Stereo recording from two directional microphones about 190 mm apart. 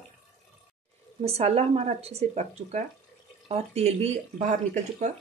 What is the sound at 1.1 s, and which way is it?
Speech, 30° right (ahead or behind).